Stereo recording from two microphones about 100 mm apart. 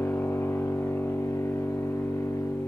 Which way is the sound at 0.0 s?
20° left (ahead or behind).